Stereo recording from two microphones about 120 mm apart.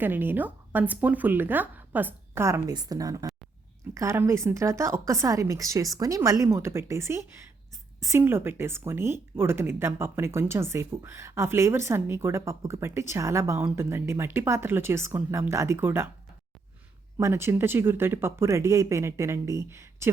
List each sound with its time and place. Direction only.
0.0 s speech: 15° right (ahead or behind)
17.2 s speech: 20° right (ahead or behind)